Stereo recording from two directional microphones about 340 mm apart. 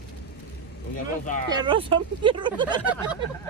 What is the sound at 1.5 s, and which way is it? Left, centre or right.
Speech, centre.